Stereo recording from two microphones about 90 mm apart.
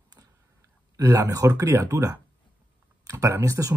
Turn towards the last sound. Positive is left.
turn(degrees=-35)  # may be behind; listen again after turning